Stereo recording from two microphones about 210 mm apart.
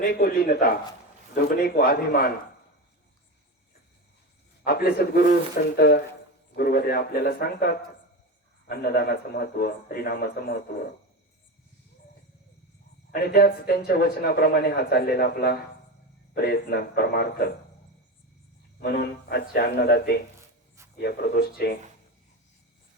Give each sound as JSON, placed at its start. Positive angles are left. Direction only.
{"t": 0.1, "sound": "a man's voice", "side_deg": 45}
{"t": 4.6, "sound": "a man's voice", "side_deg": 45}
{"t": 13.1, "sound": "a man's voice", "side_deg": 45}
{"t": 18.8, "sound": "a man's voice", "side_deg": 45}